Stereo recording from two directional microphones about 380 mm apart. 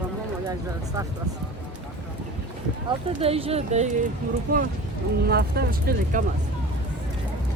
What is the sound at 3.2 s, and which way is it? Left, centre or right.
Speech, centre.